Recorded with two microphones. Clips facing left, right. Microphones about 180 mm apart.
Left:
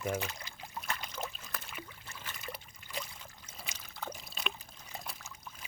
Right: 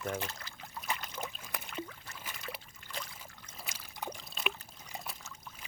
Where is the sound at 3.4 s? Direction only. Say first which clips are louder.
Even; centre (ahead or behind).